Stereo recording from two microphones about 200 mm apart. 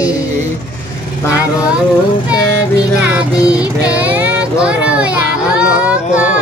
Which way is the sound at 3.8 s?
10° right (ahead or behind).